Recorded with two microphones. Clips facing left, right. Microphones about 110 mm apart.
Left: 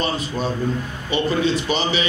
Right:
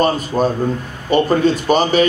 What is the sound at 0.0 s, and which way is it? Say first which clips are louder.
A man's voice: right 8 dB; 45° right (ahead or behind).